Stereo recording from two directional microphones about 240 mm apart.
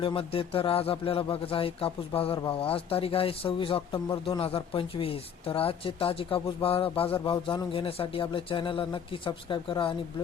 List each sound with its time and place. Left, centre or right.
0.0 s speech: left